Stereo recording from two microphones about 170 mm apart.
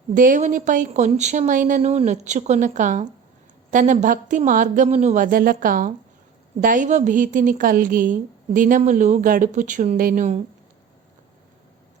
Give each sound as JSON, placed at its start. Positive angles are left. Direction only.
{"t": 0.1, "sound": "a woman's voice", "side_deg": -50}